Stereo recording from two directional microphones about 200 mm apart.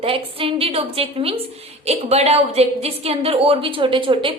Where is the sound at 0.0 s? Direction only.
30° right (ahead or behind).